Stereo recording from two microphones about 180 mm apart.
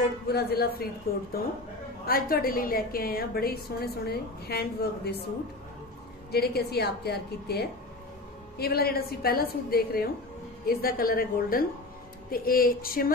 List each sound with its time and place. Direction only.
0.3 s a woman's voice: 60° left (ahead or behind)
6.3 s a woman's voice: 60° left (ahead or behind)